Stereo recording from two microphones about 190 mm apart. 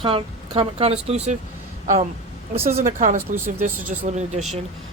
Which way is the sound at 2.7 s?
35° right (ahead or behind).